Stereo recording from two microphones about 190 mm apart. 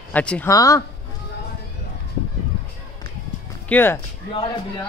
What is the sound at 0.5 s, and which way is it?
Speech, 20° left (ahead or behind).